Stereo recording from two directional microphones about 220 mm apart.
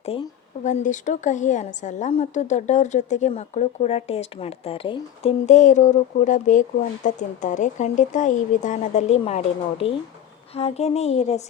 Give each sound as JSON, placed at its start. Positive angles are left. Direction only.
{"t": 0.0, "sound": "a woman's voice", "side_deg": 25}